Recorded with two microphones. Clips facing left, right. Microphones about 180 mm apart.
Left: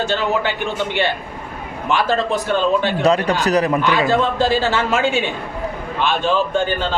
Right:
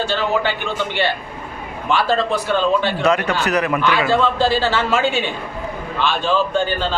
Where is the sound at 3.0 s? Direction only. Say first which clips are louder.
Left 2 dB; 35° left (ahead or behind).